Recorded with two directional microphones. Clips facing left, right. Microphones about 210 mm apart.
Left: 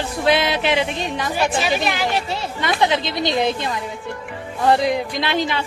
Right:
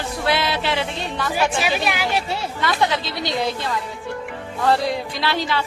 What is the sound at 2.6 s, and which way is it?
A woman's voice, 20° left (ahead or behind).